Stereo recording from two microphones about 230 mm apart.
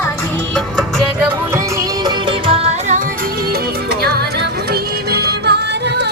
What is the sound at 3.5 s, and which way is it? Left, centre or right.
Music, right.